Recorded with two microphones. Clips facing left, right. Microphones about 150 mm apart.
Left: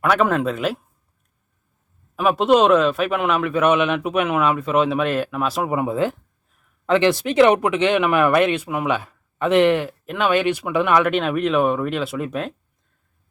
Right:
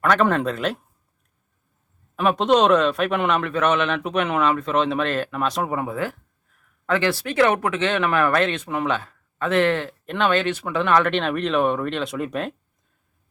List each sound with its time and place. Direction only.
0.0 s a man's voice: 5° left (ahead or behind)
2.1 s a man's voice: 5° left (ahead or behind)
5.8 s speech: 20° left (ahead or behind); by 12.5 s centre (ahead or behind)